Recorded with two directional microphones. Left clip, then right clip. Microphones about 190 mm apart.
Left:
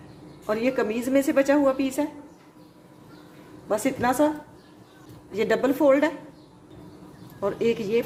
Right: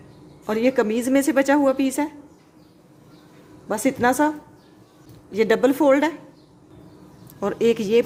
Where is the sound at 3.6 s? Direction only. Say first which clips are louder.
Right 3 dB; 45° right (ahead or behind).